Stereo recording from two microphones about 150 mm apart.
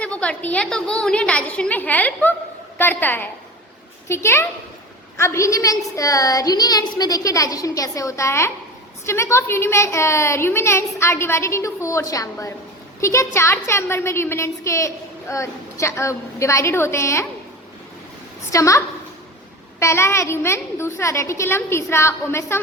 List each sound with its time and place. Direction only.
0.0 s a child's voice: 10° left (ahead or behind)
18.5 s a woman's voice: 20° left (ahead or behind)
19.8 s a child's voice: 20° left (ahead or behind)